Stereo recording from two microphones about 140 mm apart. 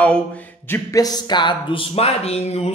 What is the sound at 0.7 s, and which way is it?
Speech, 25° left (ahead or behind).